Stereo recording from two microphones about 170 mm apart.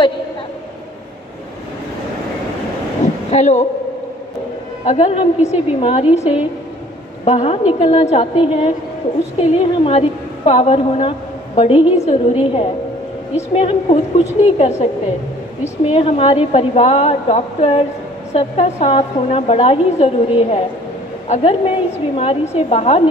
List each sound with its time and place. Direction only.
3.3 s a man's voice: 45° left (ahead or behind)
4.8 s a woman's voice: 40° left (ahead or behind)